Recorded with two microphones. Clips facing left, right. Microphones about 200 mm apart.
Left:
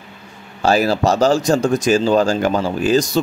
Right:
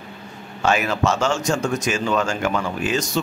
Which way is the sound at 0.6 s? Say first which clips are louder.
Left 5 dB; 35° left (ahead or behind).